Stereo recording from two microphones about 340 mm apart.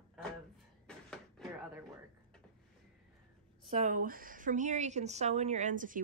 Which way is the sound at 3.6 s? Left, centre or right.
Centre.